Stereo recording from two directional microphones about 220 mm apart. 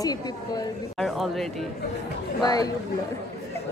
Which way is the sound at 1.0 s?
Centre (ahead or behind).